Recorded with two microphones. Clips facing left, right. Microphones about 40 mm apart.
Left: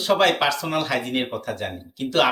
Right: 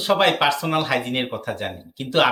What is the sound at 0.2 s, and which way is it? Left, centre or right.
Speech, centre.